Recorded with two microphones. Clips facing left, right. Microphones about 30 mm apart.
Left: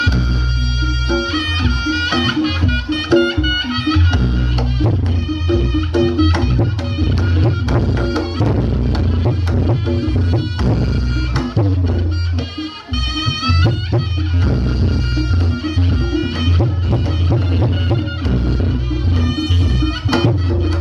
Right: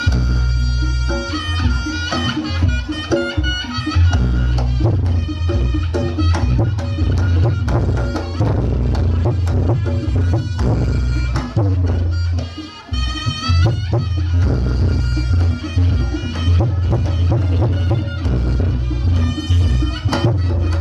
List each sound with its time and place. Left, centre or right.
1.0 s music: left
13.4 s music: left